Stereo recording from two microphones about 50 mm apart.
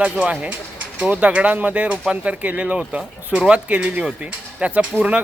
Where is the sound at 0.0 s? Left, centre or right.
Right.